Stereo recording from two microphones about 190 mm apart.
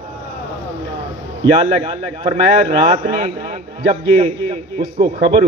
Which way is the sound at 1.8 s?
30° right (ahead or behind).